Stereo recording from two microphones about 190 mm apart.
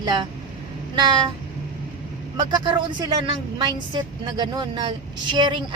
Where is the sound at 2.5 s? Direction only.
20° right (ahead or behind).